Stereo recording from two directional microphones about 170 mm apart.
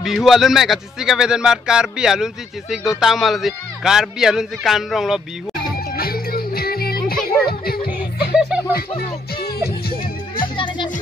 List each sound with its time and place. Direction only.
0.0 s speech: centre (ahead or behind)
5.9 s music: 60° left (ahead or behind)
8.4 s snicker: 5° right (ahead or behind)
8.7 s music: 65° left (ahead or behind)
10.5 s music: 30° left (ahead or behind)